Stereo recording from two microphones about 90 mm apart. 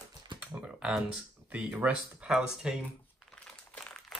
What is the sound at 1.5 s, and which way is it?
Speech, 15° right (ahead or behind).